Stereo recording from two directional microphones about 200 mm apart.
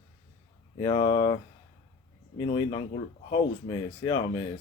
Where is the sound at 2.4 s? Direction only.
20° left (ahead or behind).